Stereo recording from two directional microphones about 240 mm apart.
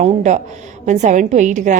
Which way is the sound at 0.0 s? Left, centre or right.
Right.